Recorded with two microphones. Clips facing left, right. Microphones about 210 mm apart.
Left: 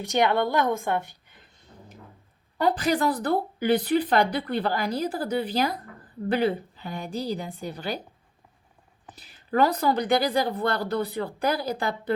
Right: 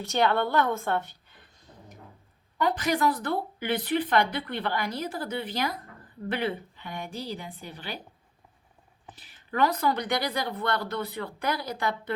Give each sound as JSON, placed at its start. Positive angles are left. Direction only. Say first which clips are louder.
{"t": 0.0, "sound": "a woman's voice", "louder": "left 2 dB", "side_deg": 15}
{"t": 2.6, "sound": "speech", "louder": "left 3 dB", "side_deg": 35}
{"t": 9.5, "sound": "speech", "louder": "left 3 dB", "side_deg": 35}